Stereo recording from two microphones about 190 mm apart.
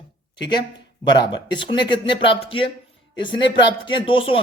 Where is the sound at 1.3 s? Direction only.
25° left (ahead or behind).